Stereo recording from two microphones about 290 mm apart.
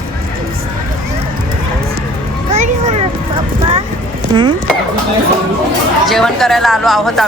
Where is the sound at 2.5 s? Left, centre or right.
Right.